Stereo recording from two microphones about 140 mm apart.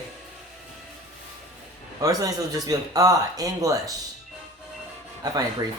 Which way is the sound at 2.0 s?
25° right (ahead or behind).